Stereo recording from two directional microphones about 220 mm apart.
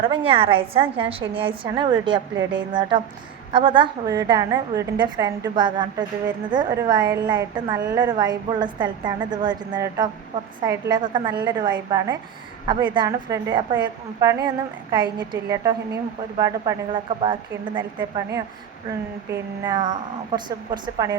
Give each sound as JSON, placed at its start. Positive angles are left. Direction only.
{"t": 0.3, "sound": "a woman's voice", "side_deg": -25}
{"t": 3.5, "sound": "a woman's voice", "side_deg": -20}
{"t": 19.3, "sound": "a woman's voice", "side_deg": -15}